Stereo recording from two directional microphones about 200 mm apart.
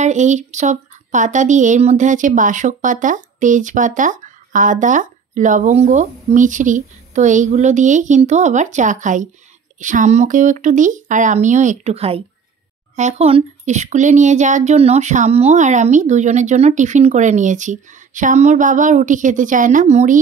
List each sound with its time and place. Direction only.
0.0 s speech: 35° right (ahead or behind)